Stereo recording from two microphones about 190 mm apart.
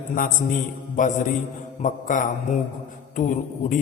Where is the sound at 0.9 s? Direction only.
40° left (ahead or behind).